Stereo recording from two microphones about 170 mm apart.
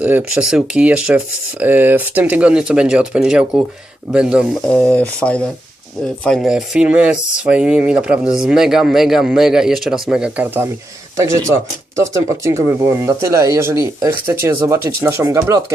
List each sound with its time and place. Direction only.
0.0 s speech: 10° right (ahead or behind)
4.6 s speech: 10° left (ahead or behind); by 15.6 s 20° right (ahead or behind)